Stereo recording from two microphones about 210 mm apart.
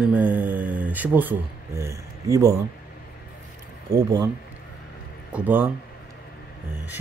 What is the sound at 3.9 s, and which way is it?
Speech, 15° right (ahead or behind).